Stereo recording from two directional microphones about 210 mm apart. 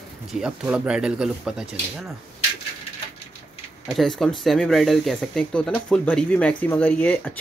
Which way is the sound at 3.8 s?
Centre (ahead or behind).